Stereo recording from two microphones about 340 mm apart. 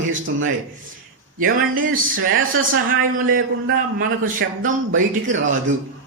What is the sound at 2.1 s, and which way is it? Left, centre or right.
A man's voice, right.